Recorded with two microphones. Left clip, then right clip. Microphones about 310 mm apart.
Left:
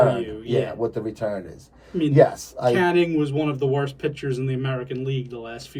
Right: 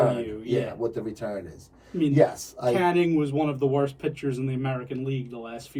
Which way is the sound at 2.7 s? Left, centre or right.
Centre.